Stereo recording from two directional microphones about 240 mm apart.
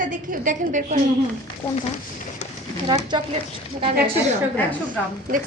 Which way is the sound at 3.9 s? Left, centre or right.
Right.